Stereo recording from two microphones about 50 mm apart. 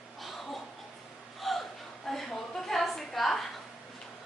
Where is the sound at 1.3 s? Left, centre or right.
Centre.